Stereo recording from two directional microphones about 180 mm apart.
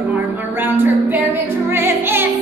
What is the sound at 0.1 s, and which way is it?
Music, 10° right (ahead or behind).